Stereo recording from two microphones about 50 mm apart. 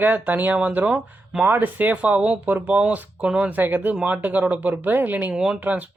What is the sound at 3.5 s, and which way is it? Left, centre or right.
Speech, right.